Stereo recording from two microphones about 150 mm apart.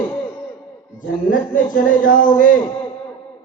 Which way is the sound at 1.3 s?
60° left (ahead or behind).